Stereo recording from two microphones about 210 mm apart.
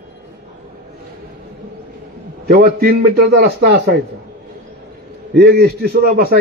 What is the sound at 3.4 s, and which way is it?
Speech, 55° right (ahead or behind).